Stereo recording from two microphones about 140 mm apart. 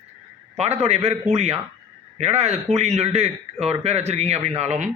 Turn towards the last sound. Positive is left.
turn(degrees=-55)  # may be behind; listen again after turning